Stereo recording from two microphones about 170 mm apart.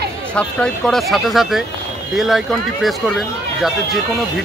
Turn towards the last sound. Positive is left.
turn(degrees=0)  # may be behind; listen again after turning